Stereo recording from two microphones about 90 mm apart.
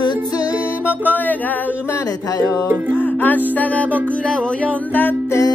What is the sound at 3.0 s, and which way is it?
Music, 20° left (ahead or behind).